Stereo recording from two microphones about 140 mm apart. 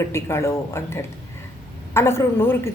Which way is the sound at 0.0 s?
20° left (ahead or behind).